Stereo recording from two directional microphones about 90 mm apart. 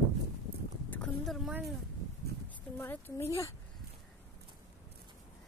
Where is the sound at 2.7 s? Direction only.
20° left (ahead or behind).